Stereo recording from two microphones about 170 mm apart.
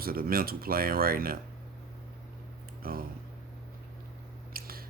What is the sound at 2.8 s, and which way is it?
Speech, 60° right (ahead or behind).